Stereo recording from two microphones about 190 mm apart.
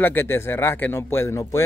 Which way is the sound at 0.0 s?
10° left (ahead or behind).